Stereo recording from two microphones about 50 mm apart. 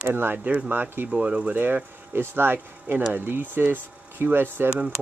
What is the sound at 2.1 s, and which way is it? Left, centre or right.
Speech, right.